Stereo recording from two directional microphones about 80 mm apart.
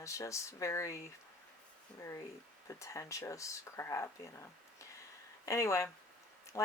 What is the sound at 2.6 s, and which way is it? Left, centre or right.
Speech, left.